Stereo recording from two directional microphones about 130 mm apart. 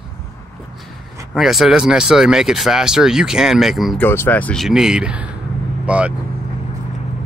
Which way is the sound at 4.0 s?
15° left (ahead or behind).